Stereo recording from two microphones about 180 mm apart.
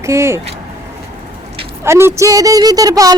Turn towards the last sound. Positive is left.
turn(degrees=-20)  # may be behind; listen again after turning